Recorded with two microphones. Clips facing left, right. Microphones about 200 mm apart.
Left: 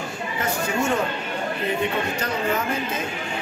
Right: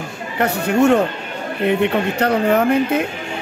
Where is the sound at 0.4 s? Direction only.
65° right (ahead or behind).